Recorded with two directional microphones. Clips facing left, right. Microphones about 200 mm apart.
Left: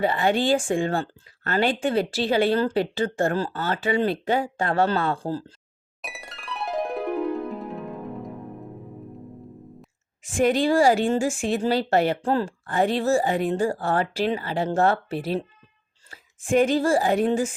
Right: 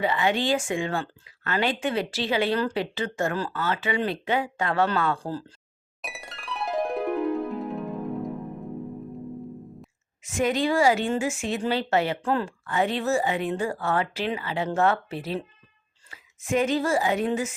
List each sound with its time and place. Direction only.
0.0 s speech: 35° left (ahead or behind)
6.0 s music: centre (ahead or behind)
10.2 s speech: 35° left (ahead or behind)
16.0 s a sound: 35° left (ahead or behind)
16.6 s speech: 30° left (ahead or behind)